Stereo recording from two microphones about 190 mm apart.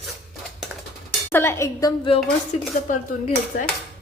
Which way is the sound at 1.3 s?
15° left (ahead or behind).